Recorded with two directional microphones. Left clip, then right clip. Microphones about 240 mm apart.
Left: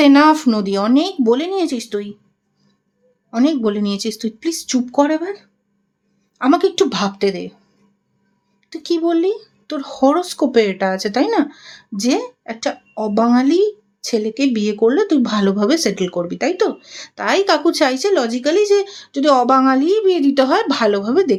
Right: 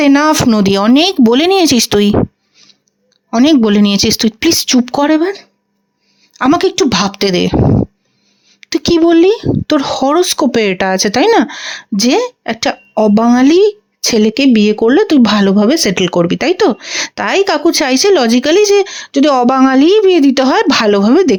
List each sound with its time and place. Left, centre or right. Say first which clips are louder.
0.0 s speech: right 2 dB; right
3.2 s speech: right 7 dB; right
8.6 s speech: right 9 dB; right